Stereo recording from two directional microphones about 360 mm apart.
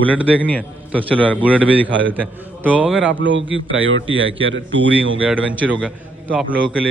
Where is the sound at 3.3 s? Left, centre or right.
Right.